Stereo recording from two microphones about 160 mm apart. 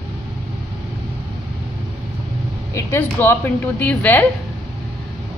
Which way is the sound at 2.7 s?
15° left (ahead or behind).